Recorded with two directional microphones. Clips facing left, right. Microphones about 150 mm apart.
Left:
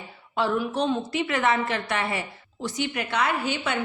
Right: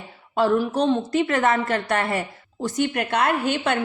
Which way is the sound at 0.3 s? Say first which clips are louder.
Right 5 dB; 40° right (ahead or behind).